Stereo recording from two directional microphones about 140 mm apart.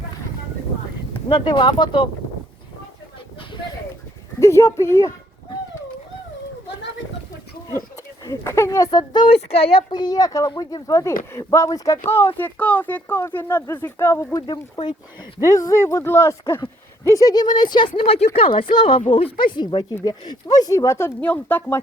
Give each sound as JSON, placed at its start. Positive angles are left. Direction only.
{"t": 1.3, "sound": "speech", "side_deg": 35}
{"t": 4.4, "sound": "speech", "side_deg": 20}
{"t": 8.2, "sound": "speech", "side_deg": 20}
{"t": 10.0, "sound": "speech", "side_deg": 25}
{"t": 14.4, "sound": "speech", "side_deg": 30}